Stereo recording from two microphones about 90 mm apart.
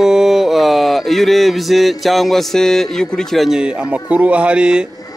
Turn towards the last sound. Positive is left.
turn(degrees=-10)  # may be behind; listen again after turning